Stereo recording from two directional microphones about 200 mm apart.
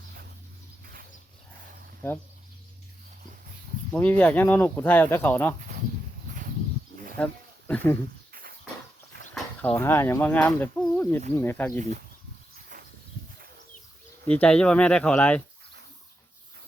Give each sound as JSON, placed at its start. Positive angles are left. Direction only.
{"t": 2.0, "sound": "speech", "side_deg": 10}
{"t": 3.9, "sound": "speech", "side_deg": 10}
{"t": 6.3, "sound": "a sound", "side_deg": -40}
{"t": 7.2, "sound": "speech", "side_deg": 5}
{"t": 8.3, "sound": "a sound", "side_deg": -45}
{"t": 9.3, "sound": "speech", "side_deg": 5}
{"t": 11.8, "sound": "speech", "side_deg": -40}
{"t": 12.5, "sound": "a sound", "side_deg": -45}
{"t": 14.3, "sound": "speech", "side_deg": 5}